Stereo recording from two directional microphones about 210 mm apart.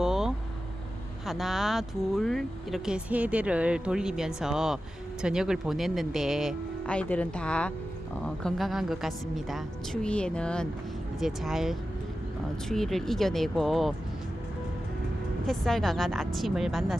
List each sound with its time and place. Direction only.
0.0 s vehicle: centre (ahead or behind)
1.2 s speech: centre (ahead or behind)
15.4 s speech: centre (ahead or behind)